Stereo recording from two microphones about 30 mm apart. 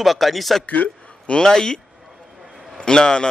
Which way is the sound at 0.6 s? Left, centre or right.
Left.